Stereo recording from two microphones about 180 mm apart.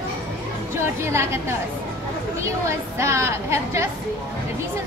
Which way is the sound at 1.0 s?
15° right (ahead or behind).